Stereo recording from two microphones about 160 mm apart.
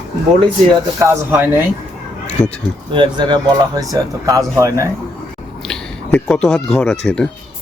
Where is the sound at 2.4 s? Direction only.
25° left (ahead or behind).